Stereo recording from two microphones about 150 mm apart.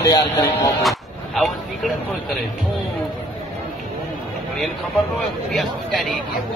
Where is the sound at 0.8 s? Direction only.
Centre (ahead or behind).